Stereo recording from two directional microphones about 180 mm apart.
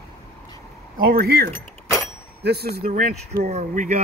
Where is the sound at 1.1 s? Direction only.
60° right (ahead or behind).